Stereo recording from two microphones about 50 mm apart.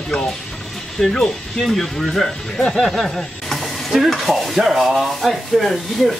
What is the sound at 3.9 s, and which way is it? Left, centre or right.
Rub, centre.